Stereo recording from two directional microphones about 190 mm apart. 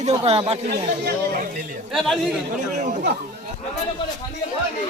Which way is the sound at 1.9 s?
Centre (ahead or behind).